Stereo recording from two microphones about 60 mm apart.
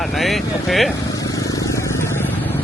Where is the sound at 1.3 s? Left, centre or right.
Left.